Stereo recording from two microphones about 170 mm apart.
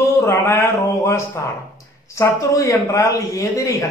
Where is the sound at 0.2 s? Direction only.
15° left (ahead or behind).